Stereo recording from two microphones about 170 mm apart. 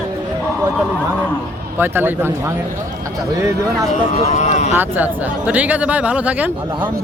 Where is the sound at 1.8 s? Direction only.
10° right (ahead or behind).